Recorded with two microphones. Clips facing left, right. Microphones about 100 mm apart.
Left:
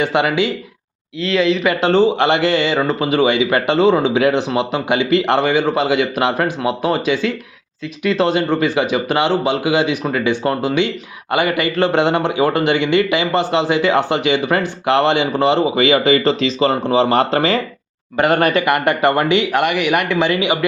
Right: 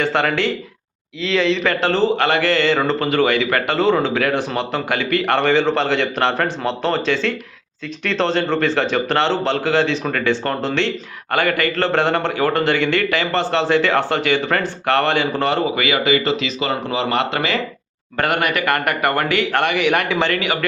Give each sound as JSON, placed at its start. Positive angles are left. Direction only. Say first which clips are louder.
{"t": 0.0, "sound": "a man's voice", "louder": "left 2 dB", "side_deg": 15}
{"t": 1.8, "sound": "a man's voice", "louder": "left 5 dB", "side_deg": 20}
{"t": 5.5, "sound": "a man's voice", "louder": "left 1 dB", "side_deg": 10}
{"t": 18.6, "sound": "a man's voice", "louder": "left 4 dB", "side_deg": 20}
{"t": 19.6, "sound": "a man's voice", "louder": "left 1 dB", "side_deg": 5}
{"t": 20.3, "sound": "a man's voice", "louder": "left 4 dB", "side_deg": 20}